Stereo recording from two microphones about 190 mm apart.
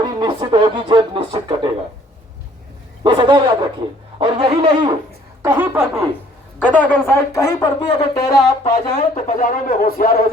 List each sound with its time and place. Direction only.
0.0 s speech: 25° right (ahead or behind)
3.0 s speech: 25° right (ahead or behind)
5.4 s a woman's voice: 10° right (ahead or behind)
6.6 s speech: 5° left (ahead or behind)
9.0 s speech: 40° left (ahead or behind)